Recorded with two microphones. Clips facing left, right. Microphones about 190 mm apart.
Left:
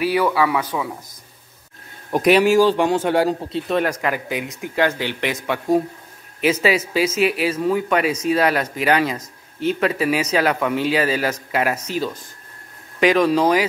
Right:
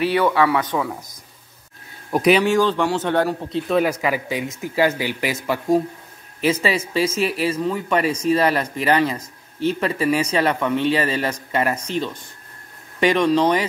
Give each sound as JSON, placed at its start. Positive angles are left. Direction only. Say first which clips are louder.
{"t": 0.0, "sound": "speech", "louder": "right 1 dB", "side_deg": 10}
{"t": 2.0, "sound": "speech", "louder": "left 1 dB", "side_deg": 0}
{"t": 3.5, "sound": "speech", "louder": "right 6 dB", "side_deg": 0}